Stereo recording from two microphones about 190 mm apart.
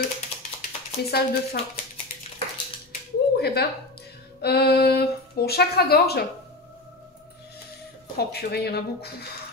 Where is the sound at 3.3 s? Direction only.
55° left (ahead or behind).